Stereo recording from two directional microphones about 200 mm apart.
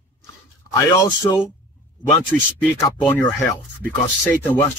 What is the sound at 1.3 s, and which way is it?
Speech, 15° left (ahead or behind).